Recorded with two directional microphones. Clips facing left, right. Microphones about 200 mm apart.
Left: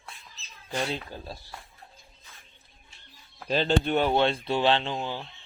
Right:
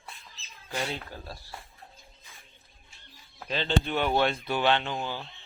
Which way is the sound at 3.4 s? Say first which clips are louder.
Left 4 dB; 45° left (ahead or behind).